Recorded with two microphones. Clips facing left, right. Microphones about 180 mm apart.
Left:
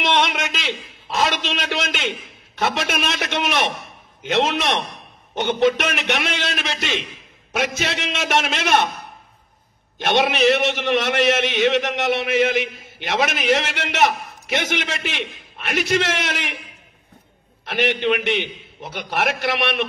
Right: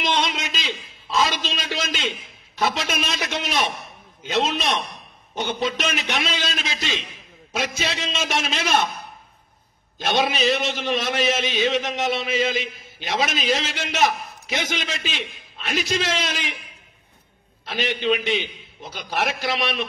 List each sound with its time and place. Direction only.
0.0 s a sound: 70° left (ahead or behind)
2.6 s a man's voice: 60° left (ahead or behind)
9.9 s a man's voice: 65° left (ahead or behind)
17.6 s a man's voice: 65° left (ahead or behind)